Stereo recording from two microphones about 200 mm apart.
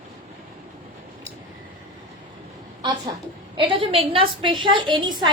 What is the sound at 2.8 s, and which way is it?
A woman's voice, 20° right (ahead or behind).